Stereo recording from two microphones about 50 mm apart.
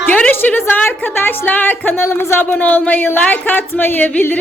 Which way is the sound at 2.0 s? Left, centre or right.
Left.